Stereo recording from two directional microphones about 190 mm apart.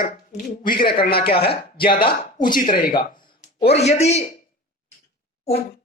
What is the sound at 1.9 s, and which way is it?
Speech, 25° left (ahead or behind).